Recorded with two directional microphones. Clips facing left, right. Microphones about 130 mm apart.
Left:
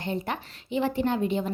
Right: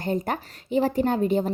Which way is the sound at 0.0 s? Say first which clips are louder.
Right 4 dB; 45° right (ahead or behind).